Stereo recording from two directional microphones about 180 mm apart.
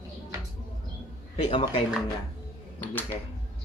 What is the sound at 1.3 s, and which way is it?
Speech, 30° left (ahead or behind).